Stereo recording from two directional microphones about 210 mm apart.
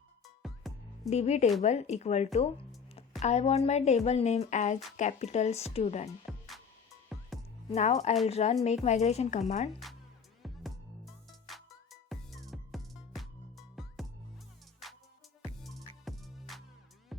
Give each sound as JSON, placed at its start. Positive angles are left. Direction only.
{"t": 0.4, "sound": "music", "side_deg": 0}
{"t": 1.1, "sound": "a woman's voice", "side_deg": 30}
{"t": 6.3, "sound": "music", "side_deg": 0}
{"t": 7.7, "sound": "a woman's voice", "side_deg": 30}
{"t": 9.8, "sound": "music", "side_deg": 0}